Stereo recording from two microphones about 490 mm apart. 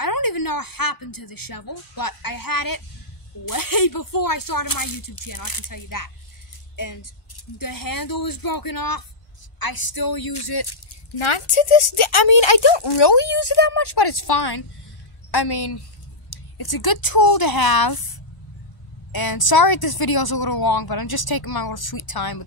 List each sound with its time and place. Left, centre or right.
0.0 s a woman's voice: left
11.2 s a woman's voice: left
19.1 s a woman's voice: left